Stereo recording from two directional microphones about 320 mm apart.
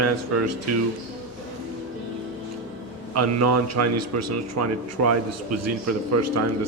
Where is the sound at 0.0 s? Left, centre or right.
Right.